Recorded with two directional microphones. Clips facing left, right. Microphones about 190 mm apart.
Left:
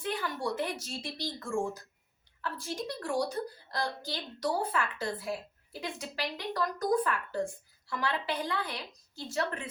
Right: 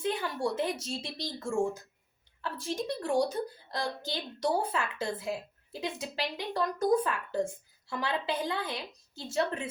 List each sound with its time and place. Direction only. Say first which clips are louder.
0.0 s a woman's voice: right 3 dB; 25° right (ahead or behind)